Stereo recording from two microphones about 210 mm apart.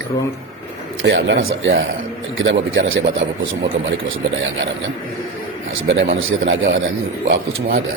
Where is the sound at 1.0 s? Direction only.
60° right (ahead or behind).